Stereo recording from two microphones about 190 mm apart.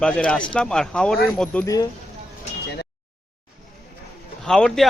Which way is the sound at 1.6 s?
20° left (ahead or behind).